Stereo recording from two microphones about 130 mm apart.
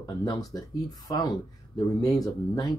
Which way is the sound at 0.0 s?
30° left (ahead or behind).